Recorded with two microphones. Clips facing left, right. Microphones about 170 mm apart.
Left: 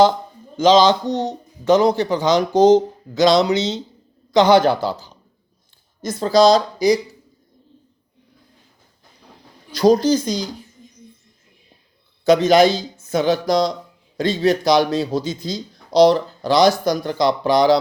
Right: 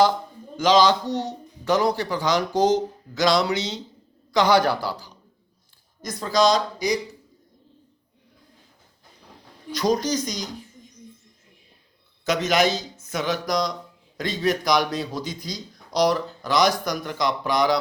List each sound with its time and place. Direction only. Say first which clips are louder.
0.5 s speech: left 5 dB; 20° left (ahead or behind)
9.7 s speech: left 8 dB; 30° left (ahead or behind)
12.2 s speech: left 8 dB; 30° left (ahead or behind)